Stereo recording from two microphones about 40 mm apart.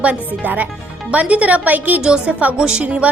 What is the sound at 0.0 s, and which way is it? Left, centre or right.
A woman's voice, right.